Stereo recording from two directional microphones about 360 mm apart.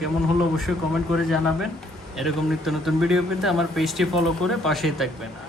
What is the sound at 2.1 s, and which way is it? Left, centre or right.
Speech, centre.